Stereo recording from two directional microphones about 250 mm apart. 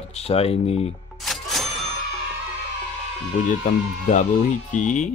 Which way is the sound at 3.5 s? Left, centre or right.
Left.